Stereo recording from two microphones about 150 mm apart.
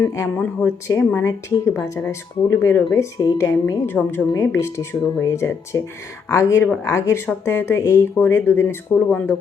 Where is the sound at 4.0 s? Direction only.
Centre (ahead or behind).